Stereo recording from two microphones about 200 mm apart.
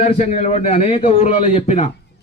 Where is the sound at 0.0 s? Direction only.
35° left (ahead or behind).